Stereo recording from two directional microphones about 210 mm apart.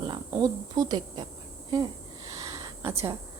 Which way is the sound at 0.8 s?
20° right (ahead or behind).